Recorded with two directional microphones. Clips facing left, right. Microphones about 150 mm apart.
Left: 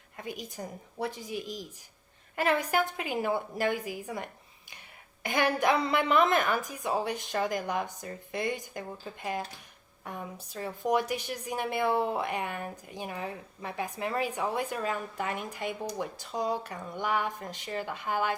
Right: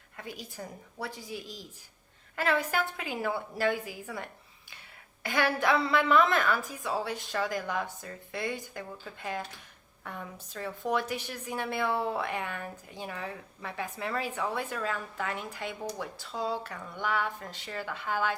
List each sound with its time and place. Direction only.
0.2 s a woman's voice: 15° left (ahead or behind)
10.0 s a woman's voice: 15° left (ahead or behind)